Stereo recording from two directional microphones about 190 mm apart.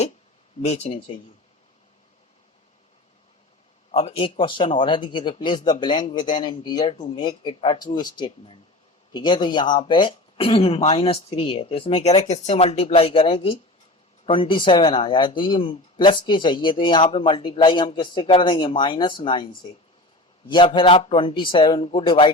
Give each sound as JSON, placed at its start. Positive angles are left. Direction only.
{"t": 0.6, "sound": "speech", "side_deg": 35}
{"t": 3.9, "sound": "speech", "side_deg": 35}
{"t": 20.5, "sound": "speech", "side_deg": 25}